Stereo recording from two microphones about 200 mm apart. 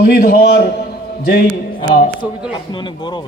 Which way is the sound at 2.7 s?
20° left (ahead or behind).